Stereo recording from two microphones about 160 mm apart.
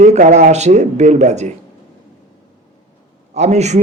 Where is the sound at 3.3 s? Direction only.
45° right (ahead or behind).